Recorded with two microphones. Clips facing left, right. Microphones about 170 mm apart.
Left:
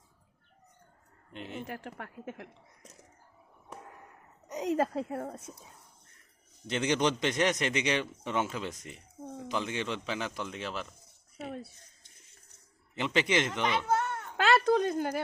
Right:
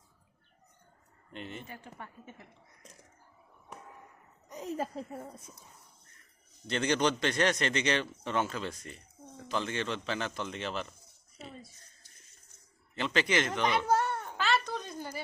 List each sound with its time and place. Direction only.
1.3 s speech: 5° left (ahead or behind)
1.6 s speech: 90° left
4.4 s a woman's voice: 80° left
6.7 s a man's voice: 15° left (ahead or behind)
11.3 s speech: 70° left (ahead or behind)
13.0 s a man's voice: 15° left (ahead or behind)
13.5 s speech: 15° right (ahead or behind)
14.5 s a sound: 55° left (ahead or behind)